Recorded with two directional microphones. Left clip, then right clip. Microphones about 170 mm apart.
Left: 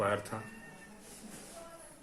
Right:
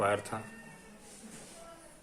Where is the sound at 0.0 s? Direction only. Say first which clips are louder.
Right 2 dB; 30° right (ahead or behind).